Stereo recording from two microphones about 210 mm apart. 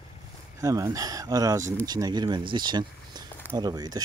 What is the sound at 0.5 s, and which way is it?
Speech, 15° right (ahead or behind).